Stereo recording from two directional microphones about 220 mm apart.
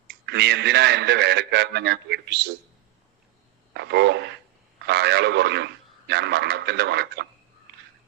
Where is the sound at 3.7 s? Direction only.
50° right (ahead or behind).